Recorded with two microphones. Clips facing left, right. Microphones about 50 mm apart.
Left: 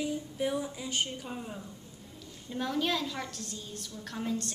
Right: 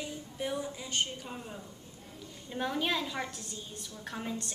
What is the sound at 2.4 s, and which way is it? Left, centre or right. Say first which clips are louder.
A woman's voice: left 1 dB; centre.